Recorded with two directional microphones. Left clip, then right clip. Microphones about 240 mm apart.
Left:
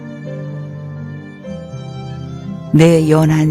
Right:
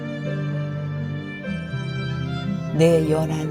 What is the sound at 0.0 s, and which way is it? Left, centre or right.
Music, centre.